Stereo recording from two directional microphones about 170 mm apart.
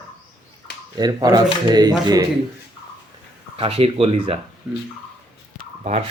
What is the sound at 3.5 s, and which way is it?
Speech, 35° right (ahead or behind).